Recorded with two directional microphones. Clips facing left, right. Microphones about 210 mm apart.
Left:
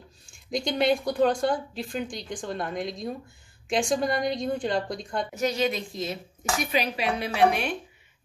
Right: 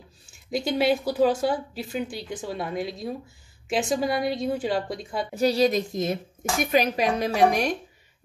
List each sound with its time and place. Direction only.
0.3 s speech: 5° right (ahead or behind)
5.3 s a woman's voice: 35° right (ahead or behind)